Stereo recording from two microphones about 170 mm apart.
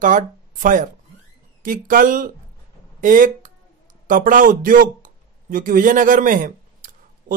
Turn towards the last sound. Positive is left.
turn(degrees=-50)  # may be behind; listen again after turning